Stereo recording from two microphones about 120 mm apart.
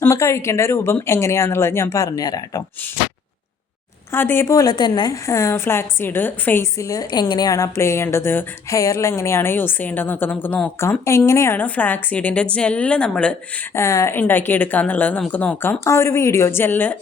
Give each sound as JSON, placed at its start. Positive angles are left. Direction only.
{"t": 0.0, "sound": "a woman's voice", "side_deg": 25}
{"t": 4.1, "sound": "a woman's voice", "side_deg": 20}
{"t": 5.2, "sound": "a woman's voice", "side_deg": 25}
{"t": 13.7, "sound": "speech", "side_deg": 25}
{"t": 15.8, "sound": "a woman's voice", "side_deg": 25}